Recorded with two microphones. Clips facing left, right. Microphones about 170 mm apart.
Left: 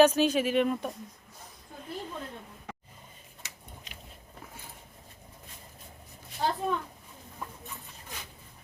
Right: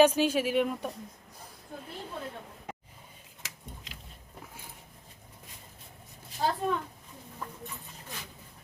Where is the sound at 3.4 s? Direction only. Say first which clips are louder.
Right 4 dB; 90° right.